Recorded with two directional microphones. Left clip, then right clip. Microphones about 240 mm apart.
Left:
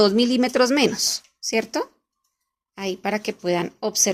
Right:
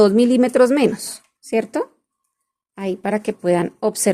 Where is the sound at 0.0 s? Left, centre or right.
Centre.